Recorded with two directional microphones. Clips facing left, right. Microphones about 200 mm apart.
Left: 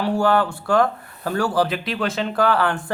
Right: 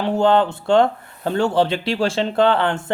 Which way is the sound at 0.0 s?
20° right (ahead or behind).